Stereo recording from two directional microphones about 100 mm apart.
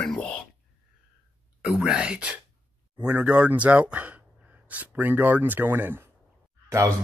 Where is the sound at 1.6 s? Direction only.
10° right (ahead or behind).